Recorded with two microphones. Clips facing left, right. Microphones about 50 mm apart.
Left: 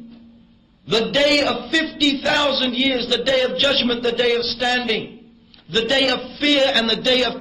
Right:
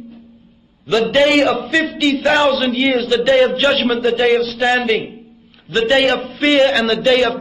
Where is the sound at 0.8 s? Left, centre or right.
Right.